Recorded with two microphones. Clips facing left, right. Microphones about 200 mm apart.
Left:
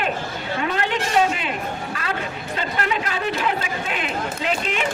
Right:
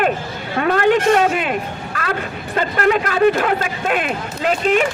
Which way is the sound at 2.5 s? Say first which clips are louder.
Right 9 dB; 50° right (ahead or behind).